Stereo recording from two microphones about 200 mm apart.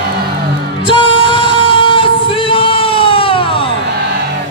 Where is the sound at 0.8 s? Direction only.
25° left (ahead or behind).